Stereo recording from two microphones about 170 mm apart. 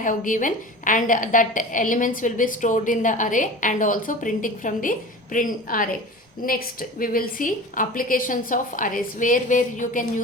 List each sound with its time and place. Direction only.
0.0 s a woman's voice: 50° left (ahead or behind)